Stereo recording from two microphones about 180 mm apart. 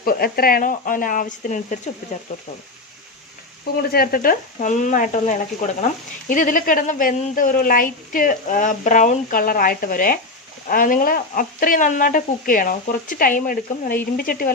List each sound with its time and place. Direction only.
0.0 s speech: 55° left (ahead or behind)
3.8 s speech: 55° left (ahead or behind)